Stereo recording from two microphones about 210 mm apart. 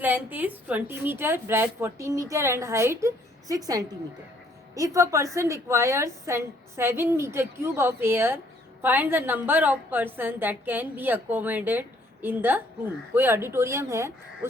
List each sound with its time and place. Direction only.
0.0 s a woman's voice: 10° right (ahead or behind)